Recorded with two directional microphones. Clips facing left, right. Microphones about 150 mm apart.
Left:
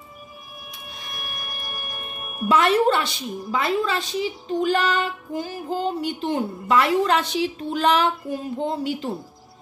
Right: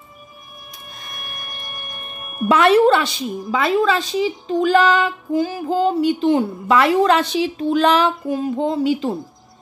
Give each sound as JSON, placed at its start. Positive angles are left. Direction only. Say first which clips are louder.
{"t": 1.1, "sound": "music", "louder": "even", "side_deg": 5}
{"t": 2.4, "sound": "a woman's voice", "louder": "right 5 dB", "side_deg": -70}